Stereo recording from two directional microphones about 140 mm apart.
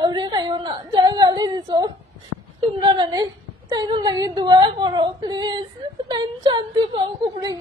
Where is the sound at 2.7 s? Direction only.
35° right (ahead or behind).